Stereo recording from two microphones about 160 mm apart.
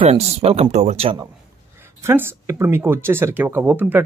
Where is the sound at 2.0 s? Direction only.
15° right (ahead or behind).